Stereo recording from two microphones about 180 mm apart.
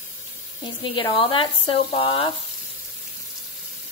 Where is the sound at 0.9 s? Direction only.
25° left (ahead or behind).